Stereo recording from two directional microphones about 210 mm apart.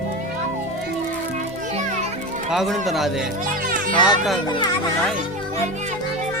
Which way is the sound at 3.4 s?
40° right (ahead or behind).